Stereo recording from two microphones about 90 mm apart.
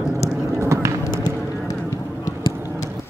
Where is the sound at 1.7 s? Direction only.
35° left (ahead or behind).